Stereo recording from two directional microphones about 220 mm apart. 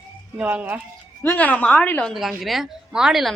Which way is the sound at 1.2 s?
5° left (ahead or behind).